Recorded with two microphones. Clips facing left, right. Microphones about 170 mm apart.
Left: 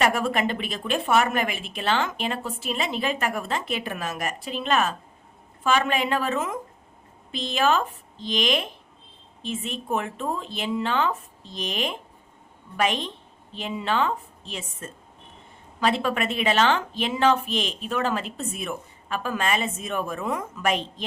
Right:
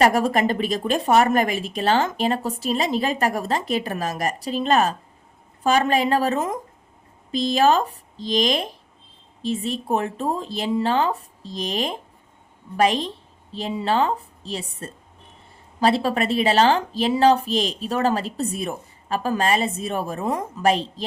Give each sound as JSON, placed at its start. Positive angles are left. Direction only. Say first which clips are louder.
{"t": 0.0, "sound": "a woman's voice", "louder": "right 5 dB", "side_deg": -40}
{"t": 15.8, "sound": "a woman's voice", "louder": "right 4 dB", "side_deg": -35}